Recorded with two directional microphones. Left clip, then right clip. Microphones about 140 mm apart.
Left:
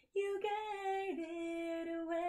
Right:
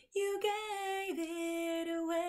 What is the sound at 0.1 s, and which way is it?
Music, 15° right (ahead or behind).